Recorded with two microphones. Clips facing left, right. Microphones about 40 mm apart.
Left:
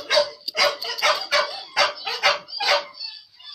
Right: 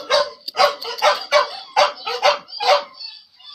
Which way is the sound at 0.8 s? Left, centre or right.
Right.